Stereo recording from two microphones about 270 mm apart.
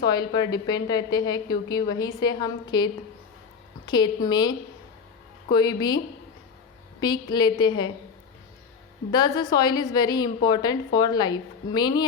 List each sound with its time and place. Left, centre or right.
0.0 s a woman's voice: centre
7.0 s a woman's voice: centre
9.1 s a woman's voice: centre